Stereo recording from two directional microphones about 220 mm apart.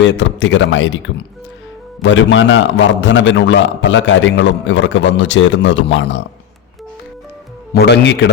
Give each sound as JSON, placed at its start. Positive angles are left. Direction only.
{"t": 0.0, "sound": "a man's voice", "side_deg": 55}
{"t": 7.7, "sound": "speech", "side_deg": 50}